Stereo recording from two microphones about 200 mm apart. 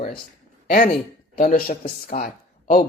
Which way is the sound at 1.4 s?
45° left (ahead or behind).